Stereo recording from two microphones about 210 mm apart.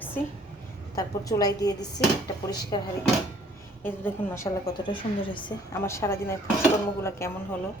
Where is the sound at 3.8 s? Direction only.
10° left (ahead or behind).